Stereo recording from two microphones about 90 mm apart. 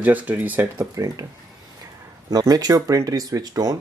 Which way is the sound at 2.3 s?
45° right (ahead or behind).